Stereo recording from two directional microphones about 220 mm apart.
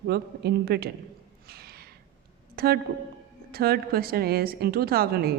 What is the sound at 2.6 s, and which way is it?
Speech, 45° right (ahead or behind).